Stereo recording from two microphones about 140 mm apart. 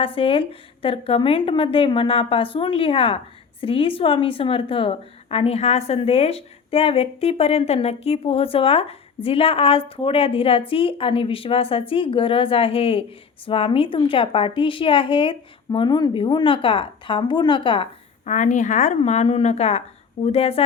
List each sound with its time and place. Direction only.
0.0 s a woman's voice: 40° left (ahead or behind)
18.3 s a woman's voice: 60° left (ahead or behind); by 20.7 s 45° left (ahead or behind)